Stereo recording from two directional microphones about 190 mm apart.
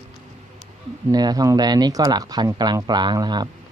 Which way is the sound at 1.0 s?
20° right (ahead or behind).